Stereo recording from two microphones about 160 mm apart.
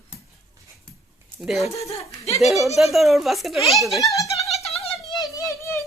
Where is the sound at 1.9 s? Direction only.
40° left (ahead or behind).